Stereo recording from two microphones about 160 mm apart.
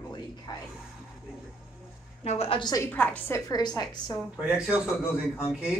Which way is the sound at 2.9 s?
10° left (ahead or behind).